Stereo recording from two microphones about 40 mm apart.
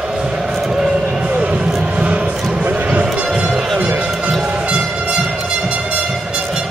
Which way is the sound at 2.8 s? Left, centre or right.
Right.